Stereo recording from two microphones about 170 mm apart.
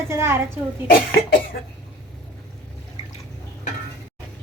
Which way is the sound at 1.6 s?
65° left (ahead or behind).